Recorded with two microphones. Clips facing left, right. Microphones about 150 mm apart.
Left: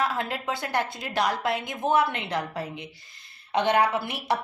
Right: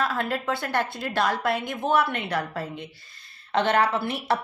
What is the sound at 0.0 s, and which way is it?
A woman's voice, 20° left (ahead or behind).